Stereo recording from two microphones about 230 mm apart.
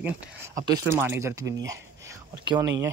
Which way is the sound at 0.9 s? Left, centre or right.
Centre.